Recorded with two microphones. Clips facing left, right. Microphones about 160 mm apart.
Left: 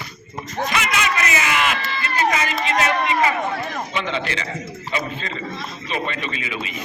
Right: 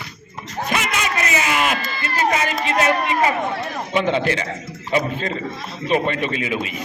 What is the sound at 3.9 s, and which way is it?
A man's voice, 50° right (ahead or behind).